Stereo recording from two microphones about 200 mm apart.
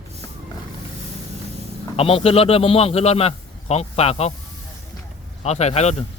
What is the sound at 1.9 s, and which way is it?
A man's voice, 30° left (ahead or behind).